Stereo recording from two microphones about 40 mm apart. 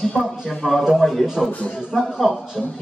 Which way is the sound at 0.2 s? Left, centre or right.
Centre.